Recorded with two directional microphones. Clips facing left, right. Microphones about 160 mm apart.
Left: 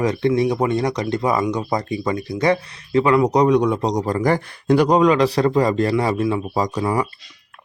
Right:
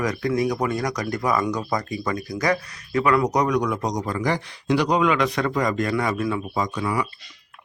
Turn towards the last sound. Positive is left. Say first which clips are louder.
# left 4 dB
turn(degrees=40)  # may be behind; listen again after turning